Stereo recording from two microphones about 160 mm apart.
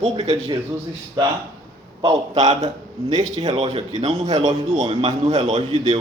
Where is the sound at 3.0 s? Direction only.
25° right (ahead or behind).